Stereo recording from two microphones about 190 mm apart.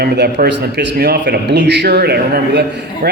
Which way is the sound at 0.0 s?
55° right (ahead or behind).